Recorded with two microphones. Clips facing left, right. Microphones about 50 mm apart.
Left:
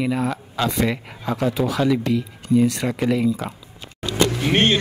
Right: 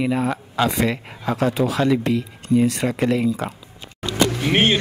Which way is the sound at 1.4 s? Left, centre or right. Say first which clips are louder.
Right 1 dB; centre.